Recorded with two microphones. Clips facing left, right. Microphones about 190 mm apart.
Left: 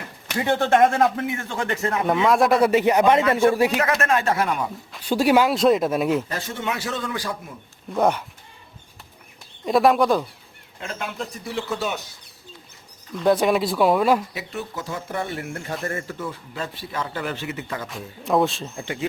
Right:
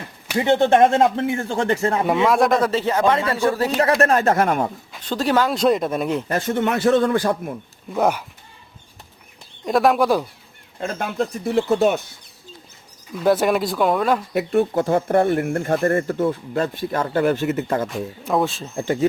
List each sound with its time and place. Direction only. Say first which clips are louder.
0.3 s speech: right 3 dB; 20° right (ahead or behind)
2.2 s a man's voice: left 1 dB; centre (ahead or behind); by 3.7 s 20° left (ahead or behind)
3.8 s speech: right 5 dB; 35° right (ahead or behind); by 4.7 s 50° right (ahead or behind)
4.9 s speech: left 7 dB; 10° left (ahead or behind)
6.2 s a man's voice: right 7 dB; 55° right (ahead or behind)
7.9 s speech: right 1 dB; 5° right (ahead or behind)
9.6 s speech: right 1 dB; centre (ahead or behind)
10.8 s speech: right 7 dB; 40° right (ahead or behind)
13.1 s speech: right 1 dB; 5° right (ahead or behind)
14.3 s speech: right 13 dB; 55° right (ahead or behind)
17.8 s speech: right 3 dB; centre (ahead or behind)
18.8 s speech: right 10 dB; 40° right (ahead or behind)